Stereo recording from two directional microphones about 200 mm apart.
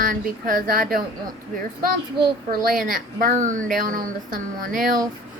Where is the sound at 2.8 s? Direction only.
40° right (ahead or behind).